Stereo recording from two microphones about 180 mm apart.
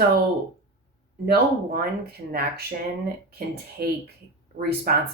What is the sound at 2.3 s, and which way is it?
Speech, 55° right (ahead or behind).